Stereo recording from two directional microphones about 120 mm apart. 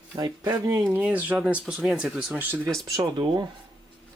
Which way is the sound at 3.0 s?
35° right (ahead or behind).